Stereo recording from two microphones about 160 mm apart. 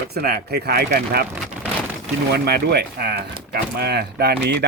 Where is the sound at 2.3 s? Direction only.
85° right.